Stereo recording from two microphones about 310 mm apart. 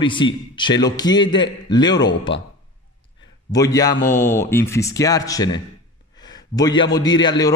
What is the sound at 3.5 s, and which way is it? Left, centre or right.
A man's voice, centre.